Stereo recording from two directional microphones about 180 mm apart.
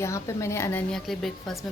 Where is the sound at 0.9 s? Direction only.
Centre (ahead or behind).